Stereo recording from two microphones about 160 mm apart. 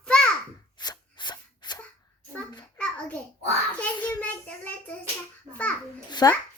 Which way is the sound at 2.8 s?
10° left (ahead or behind).